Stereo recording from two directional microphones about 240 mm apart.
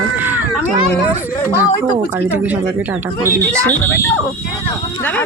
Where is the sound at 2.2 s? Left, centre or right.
Centre.